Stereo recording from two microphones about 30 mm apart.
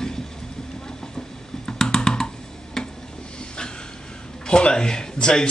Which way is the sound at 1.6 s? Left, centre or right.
Centre.